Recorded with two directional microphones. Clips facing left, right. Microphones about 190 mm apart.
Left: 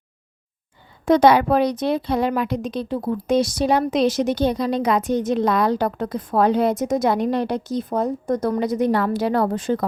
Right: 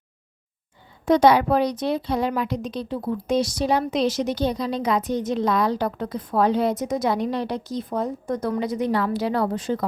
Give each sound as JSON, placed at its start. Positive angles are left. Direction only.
{"t": 1.0, "sound": "a woman's voice", "side_deg": 55}